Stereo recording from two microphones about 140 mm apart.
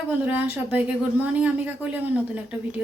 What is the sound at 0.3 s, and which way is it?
A woman's voice, 15° right (ahead or behind).